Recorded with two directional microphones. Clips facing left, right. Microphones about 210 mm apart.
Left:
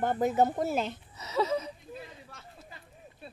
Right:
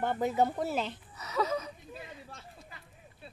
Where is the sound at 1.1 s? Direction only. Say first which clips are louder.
Left 2 dB; 25° left (ahead or behind).